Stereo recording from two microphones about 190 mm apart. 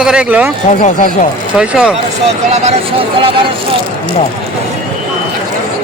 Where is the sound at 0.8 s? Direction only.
45° left (ahead or behind).